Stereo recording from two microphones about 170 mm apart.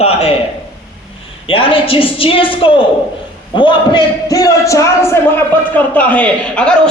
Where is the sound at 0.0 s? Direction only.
35° left (ahead or behind).